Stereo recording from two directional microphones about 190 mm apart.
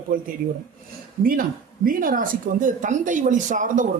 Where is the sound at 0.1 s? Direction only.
45° right (ahead or behind).